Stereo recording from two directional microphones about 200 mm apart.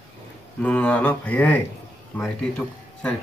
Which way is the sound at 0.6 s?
5° left (ahead or behind).